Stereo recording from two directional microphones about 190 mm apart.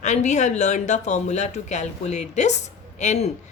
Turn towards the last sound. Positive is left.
turn(degrees=35)  # may be behind; listen again after turning